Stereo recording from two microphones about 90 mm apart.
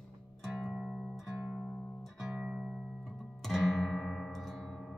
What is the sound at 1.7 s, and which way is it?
Music, 15° left (ahead or behind).